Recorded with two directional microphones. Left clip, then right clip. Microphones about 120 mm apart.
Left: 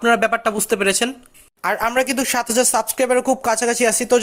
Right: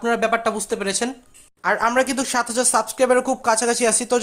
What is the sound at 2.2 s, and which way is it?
Speech, 20° left (ahead or behind).